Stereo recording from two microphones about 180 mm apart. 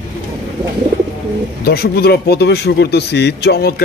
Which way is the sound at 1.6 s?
60° left (ahead or behind).